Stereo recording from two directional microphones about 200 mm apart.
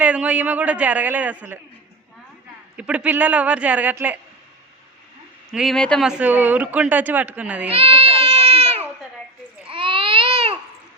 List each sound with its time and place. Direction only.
0.0 s speech: 5° right (ahead or behind)
2.7 s speech: 5° right (ahead or behind)
5.5 s speech: centre (ahead or behind)
7.7 s baby cry: 30° right (ahead or behind)